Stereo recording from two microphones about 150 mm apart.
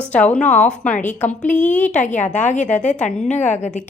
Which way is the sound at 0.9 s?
55° left (ahead or behind).